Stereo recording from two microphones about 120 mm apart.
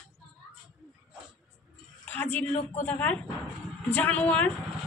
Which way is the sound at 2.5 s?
75° left (ahead or behind).